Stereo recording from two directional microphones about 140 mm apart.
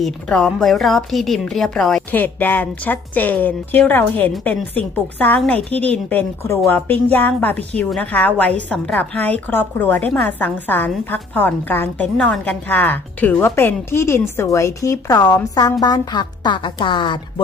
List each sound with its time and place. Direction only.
0.0 s a woman's voice: 5° left (ahead or behind)
2.0 s a woman's voice: 15° left (ahead or behind)
12.0 s a woman's voice: 5° left (ahead or behind); by 17.4 s 35° left (ahead or behind)